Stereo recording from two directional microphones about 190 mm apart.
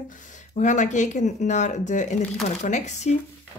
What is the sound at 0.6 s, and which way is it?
Speech, 40° left (ahead or behind).